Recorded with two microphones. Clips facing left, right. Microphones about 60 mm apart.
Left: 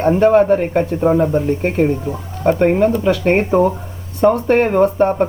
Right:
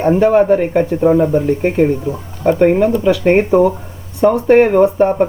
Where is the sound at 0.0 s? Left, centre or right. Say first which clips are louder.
Right 1 dB; centre.